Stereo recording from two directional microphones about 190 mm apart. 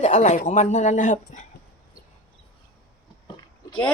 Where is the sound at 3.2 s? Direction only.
25° left (ahead or behind).